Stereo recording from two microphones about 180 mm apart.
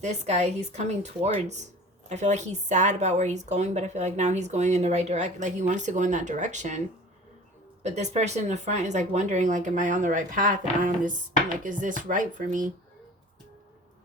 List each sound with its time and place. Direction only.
0.0 s a woman's voice: 40° right (ahead or behind)